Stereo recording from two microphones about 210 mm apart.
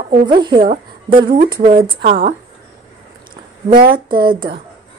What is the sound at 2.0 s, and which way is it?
Speech, 45° right (ahead or behind).